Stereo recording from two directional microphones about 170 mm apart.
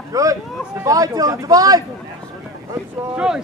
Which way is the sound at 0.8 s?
20° right (ahead or behind).